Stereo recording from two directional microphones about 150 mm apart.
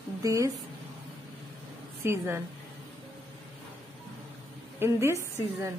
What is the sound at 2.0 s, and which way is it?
Speech, 15° right (ahead or behind).